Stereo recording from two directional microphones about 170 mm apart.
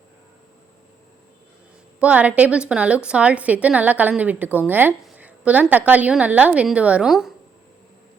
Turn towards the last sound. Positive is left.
turn(degrees=0)  # may be behind; listen again after turning